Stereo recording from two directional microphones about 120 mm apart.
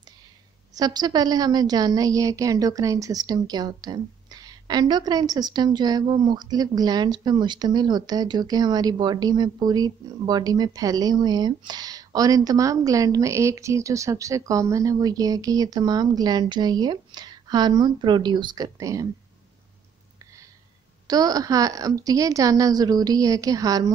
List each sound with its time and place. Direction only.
0.7 s a woman's voice: 35° right (ahead or behind)
21.1 s a woman's voice: 30° right (ahead or behind)